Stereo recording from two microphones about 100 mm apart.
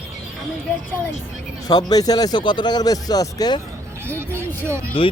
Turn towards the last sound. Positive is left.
turn(degrees=-25)  # may be behind; listen again after turning